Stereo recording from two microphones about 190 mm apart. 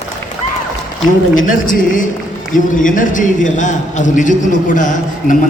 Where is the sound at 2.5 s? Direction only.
45° left (ahead or behind).